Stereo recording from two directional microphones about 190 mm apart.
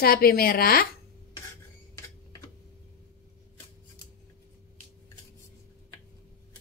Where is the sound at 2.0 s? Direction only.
15° left (ahead or behind).